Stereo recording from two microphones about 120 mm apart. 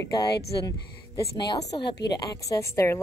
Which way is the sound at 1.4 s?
40° left (ahead or behind).